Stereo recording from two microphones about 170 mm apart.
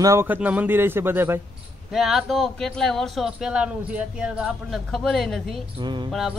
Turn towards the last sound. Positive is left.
turn(degrees=-25)  # may be behind; listen again after turning